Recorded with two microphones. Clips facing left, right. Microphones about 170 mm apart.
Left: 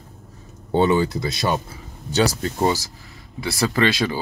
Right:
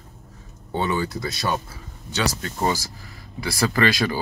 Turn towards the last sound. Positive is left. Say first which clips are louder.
# left 1 dB
turn(degrees=25)  # may be behind; listen again after turning